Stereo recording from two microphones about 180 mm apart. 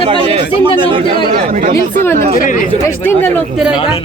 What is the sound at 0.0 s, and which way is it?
Speech, 35° right (ahead or behind).